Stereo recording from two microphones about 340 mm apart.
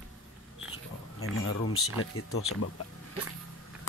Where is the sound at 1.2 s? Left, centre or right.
Left.